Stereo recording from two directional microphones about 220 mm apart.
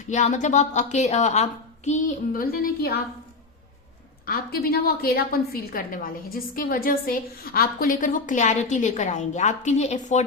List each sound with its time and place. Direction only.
0.1 s a woman's voice: 35° left (ahead or behind)
4.3 s a woman's voice: 45° left (ahead or behind)